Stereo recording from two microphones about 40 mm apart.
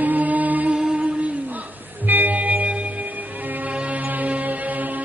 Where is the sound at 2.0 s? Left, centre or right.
Right.